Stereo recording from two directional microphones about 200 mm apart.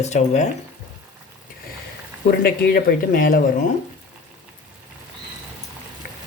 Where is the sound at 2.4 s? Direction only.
45° left (ahead or behind).